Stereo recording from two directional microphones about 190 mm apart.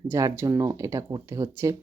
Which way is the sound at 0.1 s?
15° right (ahead or behind).